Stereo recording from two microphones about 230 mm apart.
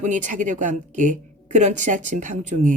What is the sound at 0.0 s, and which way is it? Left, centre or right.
Speech, right.